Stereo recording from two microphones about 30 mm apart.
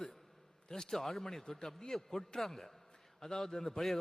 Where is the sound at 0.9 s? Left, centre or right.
Centre.